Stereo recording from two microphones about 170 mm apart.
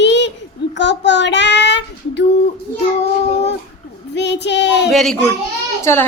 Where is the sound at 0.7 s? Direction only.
90° left.